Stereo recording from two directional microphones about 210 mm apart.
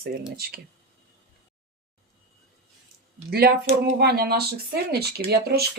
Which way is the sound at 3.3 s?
45° right (ahead or behind).